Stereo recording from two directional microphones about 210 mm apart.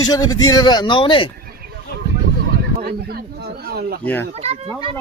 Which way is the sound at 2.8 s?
50° right (ahead or behind).